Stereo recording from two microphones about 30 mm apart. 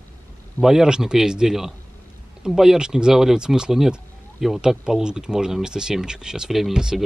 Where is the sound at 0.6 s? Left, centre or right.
Centre.